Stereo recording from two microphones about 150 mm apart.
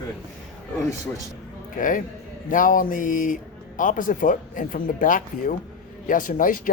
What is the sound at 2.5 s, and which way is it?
Speech, 65° left (ahead or behind).